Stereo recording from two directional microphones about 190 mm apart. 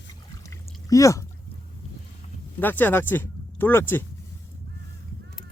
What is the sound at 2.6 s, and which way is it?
Speech, 10° left (ahead or behind).